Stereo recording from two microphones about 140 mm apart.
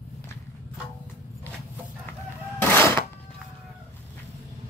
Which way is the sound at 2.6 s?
15° left (ahead or behind).